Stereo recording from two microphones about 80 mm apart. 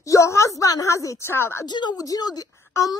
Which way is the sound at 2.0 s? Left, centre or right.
Left.